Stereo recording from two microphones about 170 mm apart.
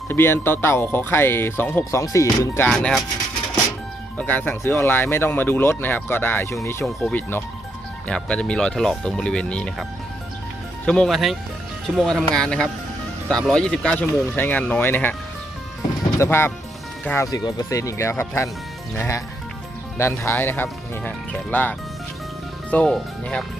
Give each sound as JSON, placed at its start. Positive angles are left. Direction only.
{"t": 0.1, "sound": "speech", "side_deg": 15}
{"t": 2.6, "sound": "speech", "side_deg": 0}
{"t": 4.2, "sound": "speech", "side_deg": 10}
{"t": 10.8, "sound": "speech", "side_deg": 5}
{"t": 16.1, "sound": "speech", "side_deg": 15}